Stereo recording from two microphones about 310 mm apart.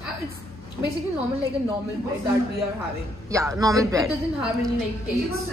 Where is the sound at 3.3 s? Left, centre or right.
Centre.